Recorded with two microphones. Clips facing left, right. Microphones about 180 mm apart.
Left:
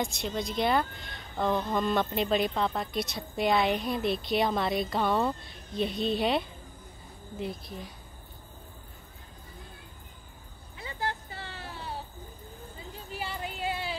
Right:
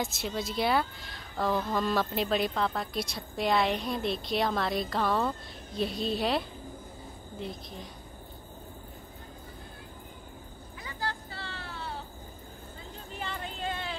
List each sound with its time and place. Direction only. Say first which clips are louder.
0.0 s a woman's voice: left 1 dB; centre (ahead or behind)
10.8 s vehicle: left 2 dB; 25° left (ahead or behind)
13.1 s a sound: left 2 dB; 10° left (ahead or behind)